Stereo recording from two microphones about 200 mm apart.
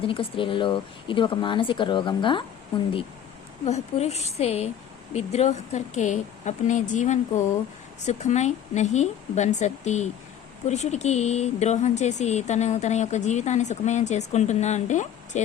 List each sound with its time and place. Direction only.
0.1 s speech: 25° left (ahead or behind)
3.7 s a woman's voice: 30° left (ahead or behind)